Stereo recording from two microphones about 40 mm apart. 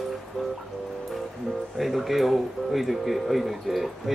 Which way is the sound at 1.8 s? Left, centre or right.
Centre.